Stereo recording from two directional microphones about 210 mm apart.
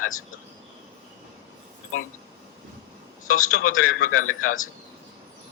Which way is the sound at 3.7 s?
80° left.